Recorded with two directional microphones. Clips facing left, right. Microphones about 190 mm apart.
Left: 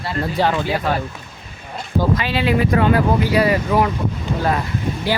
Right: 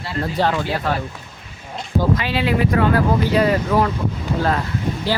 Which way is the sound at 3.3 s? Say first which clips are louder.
Even; 5° left (ahead or behind).